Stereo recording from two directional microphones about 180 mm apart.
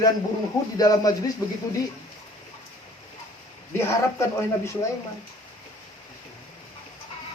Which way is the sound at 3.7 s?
15° left (ahead or behind).